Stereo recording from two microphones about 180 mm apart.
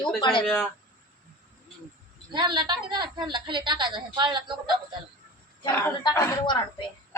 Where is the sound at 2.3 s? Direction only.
25° right (ahead or behind).